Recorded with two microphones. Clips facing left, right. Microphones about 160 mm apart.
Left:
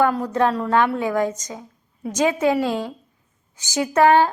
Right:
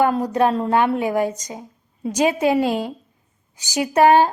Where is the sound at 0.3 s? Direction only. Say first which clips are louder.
Right 1 dB; 15° right (ahead or behind).